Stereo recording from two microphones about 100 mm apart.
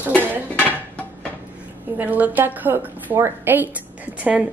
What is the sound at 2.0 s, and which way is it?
A woman's voice, 15° right (ahead or behind).